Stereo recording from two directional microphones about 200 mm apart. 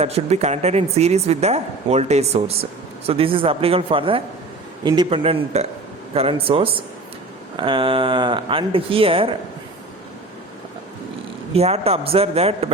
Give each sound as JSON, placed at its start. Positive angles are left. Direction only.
{"t": 0.0, "sound": "a woman's voice", "side_deg": -30}
{"t": 11.5, "sound": "a woman's voice", "side_deg": -30}